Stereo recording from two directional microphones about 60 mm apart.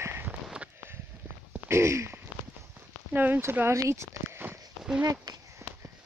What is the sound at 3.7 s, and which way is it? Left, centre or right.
Speech, right.